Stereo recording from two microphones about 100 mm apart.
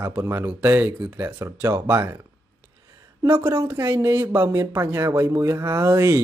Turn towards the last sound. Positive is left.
turn(degrees=-25)  # may be behind; listen again after turning